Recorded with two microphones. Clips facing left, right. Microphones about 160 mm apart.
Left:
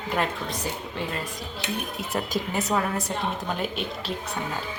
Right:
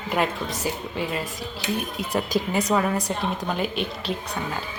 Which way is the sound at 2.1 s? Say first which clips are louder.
Right 4 dB; 5° left (ahead or behind).